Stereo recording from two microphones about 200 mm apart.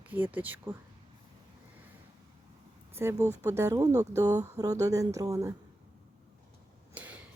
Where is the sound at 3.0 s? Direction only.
10° right (ahead or behind).